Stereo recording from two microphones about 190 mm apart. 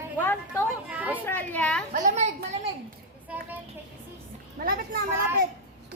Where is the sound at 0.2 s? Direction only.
10° left (ahead or behind).